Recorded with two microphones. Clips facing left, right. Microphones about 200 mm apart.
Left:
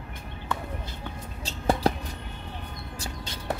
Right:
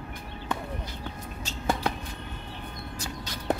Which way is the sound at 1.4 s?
35° left (ahead or behind).